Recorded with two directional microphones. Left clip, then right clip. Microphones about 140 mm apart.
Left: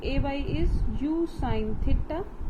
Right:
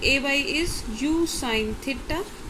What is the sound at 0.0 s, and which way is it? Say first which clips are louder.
A woman's voice: right 10 dB; 20° right (ahead or behind).